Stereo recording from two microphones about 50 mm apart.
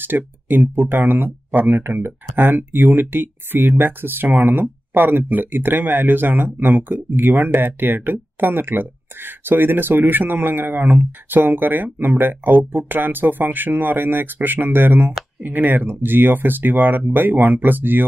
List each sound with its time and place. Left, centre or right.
0.0 s speech: right